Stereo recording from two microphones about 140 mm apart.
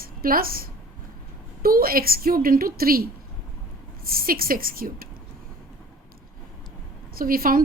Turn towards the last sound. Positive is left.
turn(degrees=-90)